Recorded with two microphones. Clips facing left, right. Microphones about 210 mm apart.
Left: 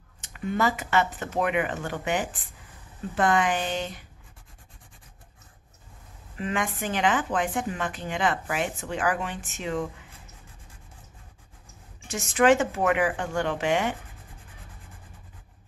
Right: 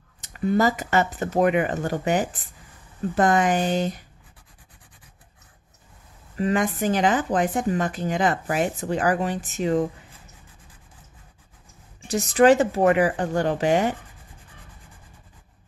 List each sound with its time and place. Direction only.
0.2 s speech: 35° right (ahead or behind)
6.3 s speech: 40° right (ahead or behind)
12.1 s speech: 35° right (ahead or behind)